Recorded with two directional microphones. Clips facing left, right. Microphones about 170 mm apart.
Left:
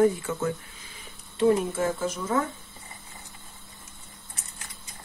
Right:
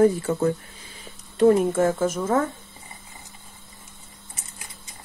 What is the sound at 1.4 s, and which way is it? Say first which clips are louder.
Speech: right 5 dB; 50° right (ahead or behind).